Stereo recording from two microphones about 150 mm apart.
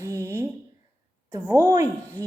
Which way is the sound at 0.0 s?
15° right (ahead or behind).